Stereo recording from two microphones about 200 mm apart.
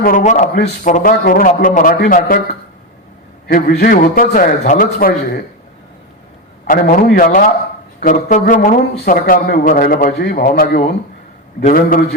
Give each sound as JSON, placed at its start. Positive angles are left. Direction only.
{"t": 0.0, "sound": "speech", "side_deg": 40}
{"t": 6.7, "sound": "speech", "side_deg": 45}